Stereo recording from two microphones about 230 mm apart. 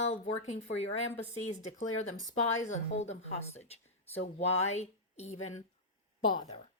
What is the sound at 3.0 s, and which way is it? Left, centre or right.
Speech, left.